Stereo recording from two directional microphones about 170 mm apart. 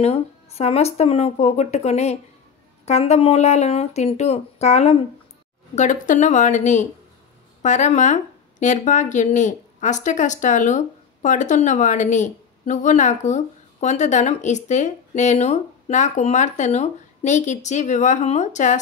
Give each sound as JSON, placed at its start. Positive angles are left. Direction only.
{"t": 0.0, "sound": "speech", "side_deg": 40}